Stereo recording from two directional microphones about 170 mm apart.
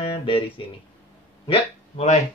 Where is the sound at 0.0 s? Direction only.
30° left (ahead or behind).